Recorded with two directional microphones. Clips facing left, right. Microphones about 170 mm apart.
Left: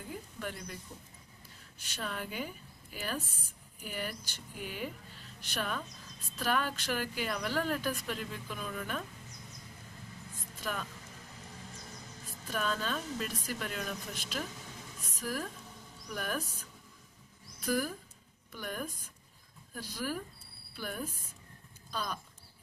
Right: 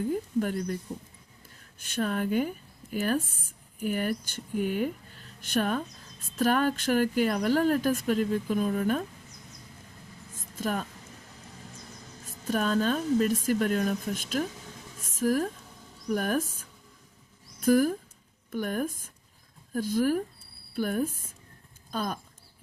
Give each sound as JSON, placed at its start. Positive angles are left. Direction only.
{"t": 0.1, "sound": "speech", "side_deg": -45}
{"t": 1.8, "sound": "speech", "side_deg": -50}
{"t": 10.6, "sound": "speech", "side_deg": -45}
{"t": 12.2, "sound": "speech", "side_deg": -45}
{"t": 15.0, "sound": "a sound", "side_deg": -45}
{"t": 16.0, "sound": "speech", "side_deg": -45}